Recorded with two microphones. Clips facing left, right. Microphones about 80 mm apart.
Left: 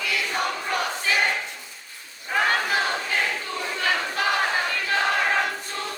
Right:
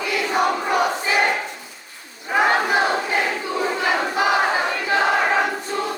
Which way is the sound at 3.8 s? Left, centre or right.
Centre.